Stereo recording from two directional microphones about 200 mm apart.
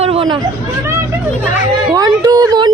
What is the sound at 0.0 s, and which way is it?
Chatter, 30° right (ahead or behind).